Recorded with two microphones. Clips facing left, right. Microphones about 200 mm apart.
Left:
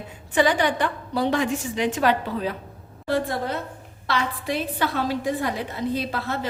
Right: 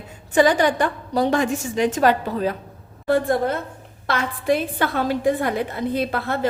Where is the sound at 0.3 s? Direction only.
45° right (ahead or behind).